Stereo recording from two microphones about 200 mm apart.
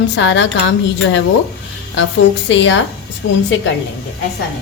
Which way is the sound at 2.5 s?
65° left (ahead or behind).